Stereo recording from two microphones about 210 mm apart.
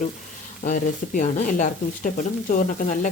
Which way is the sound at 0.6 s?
40° left (ahead or behind).